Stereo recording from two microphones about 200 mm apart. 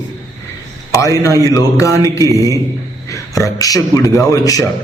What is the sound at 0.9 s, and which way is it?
A man's voice, 15° left (ahead or behind).